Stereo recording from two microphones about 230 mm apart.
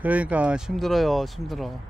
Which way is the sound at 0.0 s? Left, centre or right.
Centre.